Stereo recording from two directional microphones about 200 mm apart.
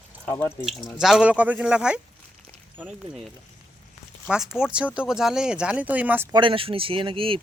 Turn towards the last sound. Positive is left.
turn(degrees=-25)  # may be behind; listen again after turning